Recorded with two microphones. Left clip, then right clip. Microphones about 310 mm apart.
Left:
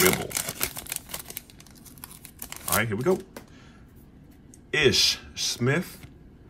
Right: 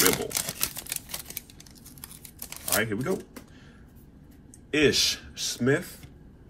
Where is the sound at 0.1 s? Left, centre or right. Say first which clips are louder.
Even; centre.